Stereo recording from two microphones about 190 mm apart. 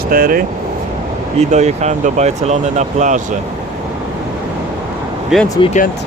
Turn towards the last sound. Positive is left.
turn(degrees=35)  # may be behind; listen again after turning